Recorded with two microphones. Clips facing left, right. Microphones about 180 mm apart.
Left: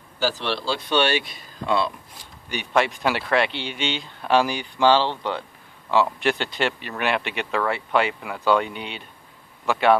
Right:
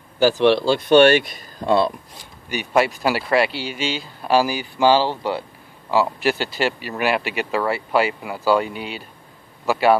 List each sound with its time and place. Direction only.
0.2 s a man's voice: 55° right (ahead or behind)
1.7 s speech: 40° right (ahead or behind)
2.5 s speech: 5° right (ahead or behind)